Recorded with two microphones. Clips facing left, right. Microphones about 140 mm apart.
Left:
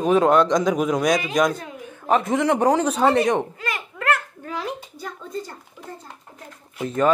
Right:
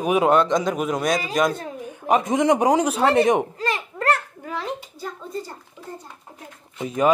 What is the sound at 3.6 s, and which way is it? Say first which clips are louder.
Babbling: right 4 dB; 35° right (ahead or behind).